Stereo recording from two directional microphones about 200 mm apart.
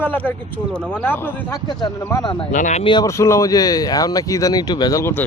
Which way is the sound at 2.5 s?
35° left (ahead or behind).